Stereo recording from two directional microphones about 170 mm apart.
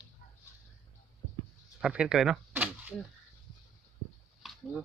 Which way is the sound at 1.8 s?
5° right (ahead or behind).